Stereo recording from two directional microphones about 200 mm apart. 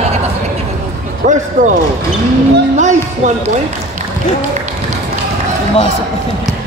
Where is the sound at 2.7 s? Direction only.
35° right (ahead or behind).